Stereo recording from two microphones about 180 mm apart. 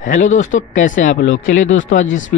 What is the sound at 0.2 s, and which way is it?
Speech, 45° left (ahead or behind).